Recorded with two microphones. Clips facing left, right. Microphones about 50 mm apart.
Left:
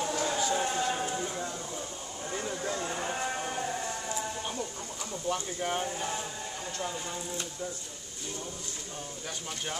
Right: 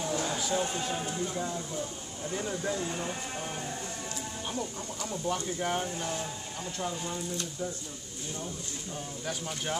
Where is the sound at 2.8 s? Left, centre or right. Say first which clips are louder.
Left 1 dB; left.